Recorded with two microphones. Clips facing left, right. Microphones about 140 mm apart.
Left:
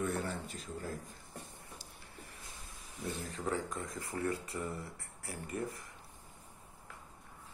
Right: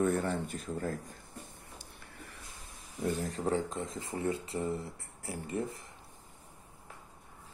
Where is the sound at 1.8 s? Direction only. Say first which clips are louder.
Right 2 dB; 60° right (ahead or behind).